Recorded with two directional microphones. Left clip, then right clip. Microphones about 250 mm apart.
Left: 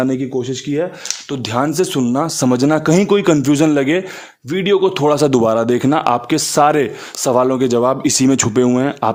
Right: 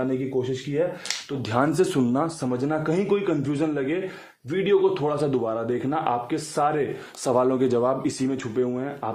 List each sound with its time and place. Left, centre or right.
1.5 s a man's voice: left
7.3 s speech: left